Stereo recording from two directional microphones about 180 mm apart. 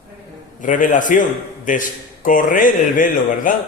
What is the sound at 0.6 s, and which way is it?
A man's voice, 45° left (ahead or behind).